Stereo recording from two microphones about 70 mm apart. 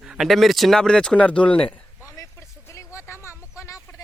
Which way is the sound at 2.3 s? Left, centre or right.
Left.